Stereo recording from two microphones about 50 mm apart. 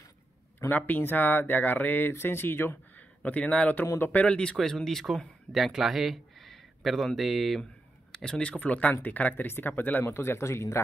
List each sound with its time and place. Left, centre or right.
0.7 s speech: left
2.1 s speech: left
3.3 s speech: left
4.6 s speech: centre
8.1 s speech: centre
8.5 s speech: left
10.0 s a man's voice: left